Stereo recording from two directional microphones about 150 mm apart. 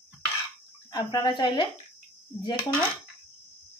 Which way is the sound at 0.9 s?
25° left (ahead or behind).